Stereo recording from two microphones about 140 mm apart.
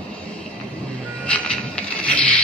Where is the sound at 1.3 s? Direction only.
10° left (ahead or behind).